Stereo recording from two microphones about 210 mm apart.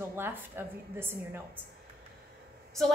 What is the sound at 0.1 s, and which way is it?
A woman's voice, 10° right (ahead or behind).